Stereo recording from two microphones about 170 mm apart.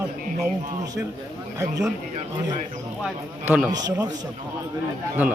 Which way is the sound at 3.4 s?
10° right (ahead or behind).